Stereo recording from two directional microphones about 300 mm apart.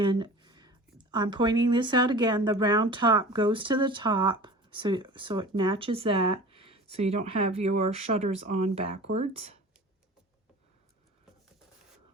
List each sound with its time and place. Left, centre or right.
0.0 s speech: centre